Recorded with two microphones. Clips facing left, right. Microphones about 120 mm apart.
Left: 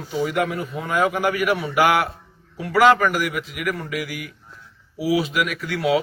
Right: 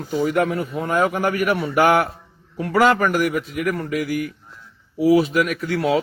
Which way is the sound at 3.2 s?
40° right (ahead or behind).